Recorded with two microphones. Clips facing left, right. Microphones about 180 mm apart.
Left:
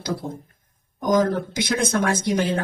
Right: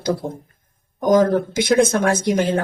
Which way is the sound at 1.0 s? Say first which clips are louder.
Right 5 dB; 50° right (ahead or behind).